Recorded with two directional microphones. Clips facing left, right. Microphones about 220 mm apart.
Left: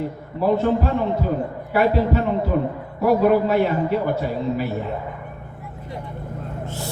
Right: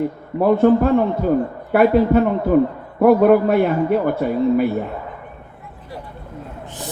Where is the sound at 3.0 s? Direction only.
55° right (ahead or behind).